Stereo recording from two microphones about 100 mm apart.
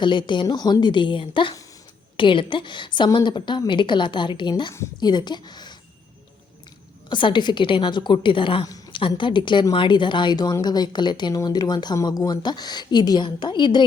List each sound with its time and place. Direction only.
0.0 s a woman's voice: 50° left (ahead or behind)
7.1 s a woman's voice: 55° left (ahead or behind)